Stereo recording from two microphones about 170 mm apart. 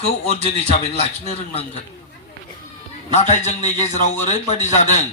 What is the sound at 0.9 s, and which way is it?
Speech, 40° left (ahead or behind).